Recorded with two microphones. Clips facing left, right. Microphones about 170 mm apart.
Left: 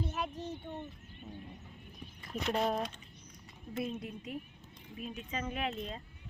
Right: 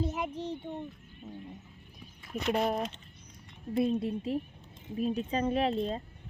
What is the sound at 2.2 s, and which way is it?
Speech, 5° right (ahead or behind).